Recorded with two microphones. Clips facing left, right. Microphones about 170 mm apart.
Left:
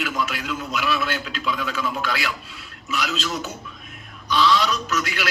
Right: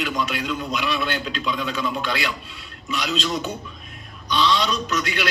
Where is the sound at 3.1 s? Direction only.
5° left (ahead or behind).